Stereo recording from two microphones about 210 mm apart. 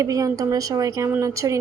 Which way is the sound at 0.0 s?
15° right (ahead or behind).